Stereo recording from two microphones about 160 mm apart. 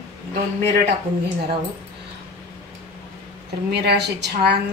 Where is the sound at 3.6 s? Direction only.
90° right.